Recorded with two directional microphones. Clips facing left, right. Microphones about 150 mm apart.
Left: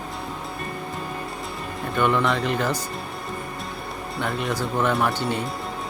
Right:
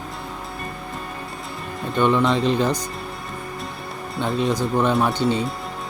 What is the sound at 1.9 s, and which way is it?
Speech, 20° right (ahead or behind).